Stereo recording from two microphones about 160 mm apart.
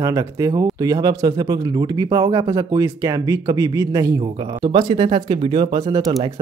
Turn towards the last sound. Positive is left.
turn(degrees=-25)  # may be behind; listen again after turning